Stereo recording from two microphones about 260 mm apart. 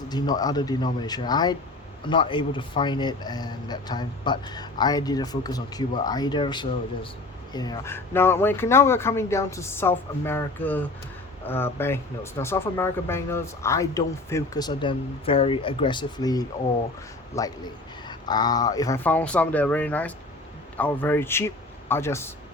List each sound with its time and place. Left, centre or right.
0.1 s speech: centre